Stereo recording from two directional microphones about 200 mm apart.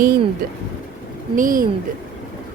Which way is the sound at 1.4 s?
40° right (ahead or behind).